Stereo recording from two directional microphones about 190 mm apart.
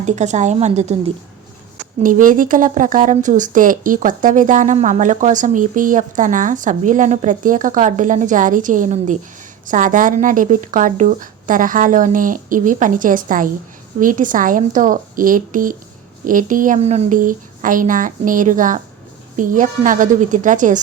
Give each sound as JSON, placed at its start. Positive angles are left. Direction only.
{"t": 0.0, "sound": "a woman's voice", "side_deg": -40}